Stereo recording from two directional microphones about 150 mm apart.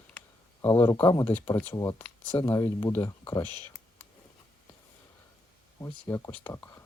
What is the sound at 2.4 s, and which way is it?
Speech, 20° left (ahead or behind).